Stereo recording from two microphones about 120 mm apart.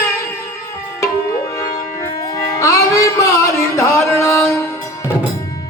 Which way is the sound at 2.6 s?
25° left (ahead or behind).